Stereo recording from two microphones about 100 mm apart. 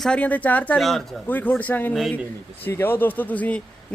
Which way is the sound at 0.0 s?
10° left (ahead or behind).